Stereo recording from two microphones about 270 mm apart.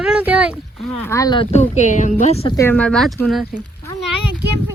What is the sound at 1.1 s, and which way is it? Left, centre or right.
Speech, centre.